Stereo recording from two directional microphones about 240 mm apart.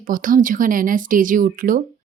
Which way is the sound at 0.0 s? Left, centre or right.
Right.